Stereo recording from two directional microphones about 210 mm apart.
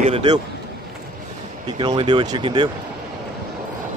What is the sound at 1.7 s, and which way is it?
Speech, 20° right (ahead or behind).